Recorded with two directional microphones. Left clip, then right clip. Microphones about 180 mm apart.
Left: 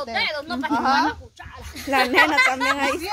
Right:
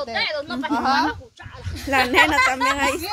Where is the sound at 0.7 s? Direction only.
15° right (ahead or behind).